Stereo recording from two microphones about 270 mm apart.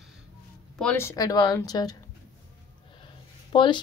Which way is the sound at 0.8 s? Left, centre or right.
Centre.